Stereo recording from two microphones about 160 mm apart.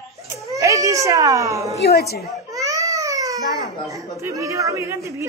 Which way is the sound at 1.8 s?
85° left.